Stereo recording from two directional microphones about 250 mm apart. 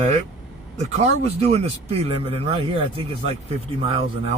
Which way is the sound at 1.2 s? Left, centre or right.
Right.